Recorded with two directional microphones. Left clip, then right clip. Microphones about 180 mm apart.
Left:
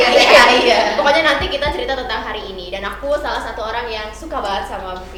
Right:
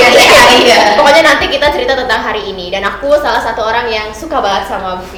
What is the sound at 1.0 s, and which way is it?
A woman's voice, 25° right (ahead or behind).